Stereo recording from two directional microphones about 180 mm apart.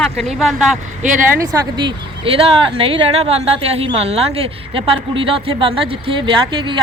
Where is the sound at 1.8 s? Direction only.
30° right (ahead or behind).